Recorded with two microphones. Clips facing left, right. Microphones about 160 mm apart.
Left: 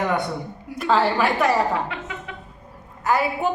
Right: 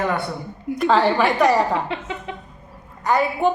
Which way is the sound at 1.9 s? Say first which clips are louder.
Right 4 dB; 25° right (ahead or behind).